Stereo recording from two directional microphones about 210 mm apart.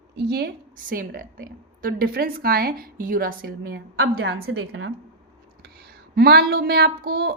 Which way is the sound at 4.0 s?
70° right (ahead or behind).